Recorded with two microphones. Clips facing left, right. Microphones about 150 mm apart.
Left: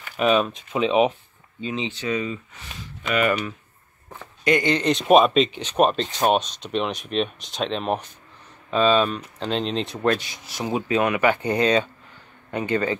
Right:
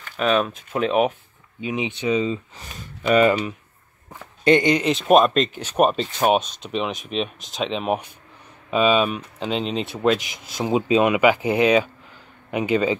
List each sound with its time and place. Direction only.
0.0 s a sound: 10° left (ahead or behind)
0.5 s speech: 5° right (ahead or behind)
1.6 s speech: 15° right (ahead or behind)
2.6 s speech: 35° right (ahead or behind)
3.3 s speech: 20° right (ahead or behind)
4.7 s speech: centre (ahead or behind)